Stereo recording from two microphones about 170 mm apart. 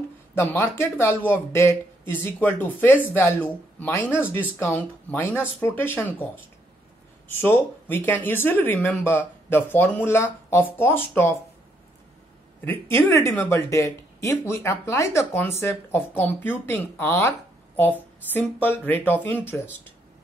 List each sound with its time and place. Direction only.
0.3 s speech: 15° left (ahead or behind)
7.2 s speech: 15° left (ahead or behind)
12.6 s speech: 15° left (ahead or behind)
18.3 s speech: 10° left (ahead or behind)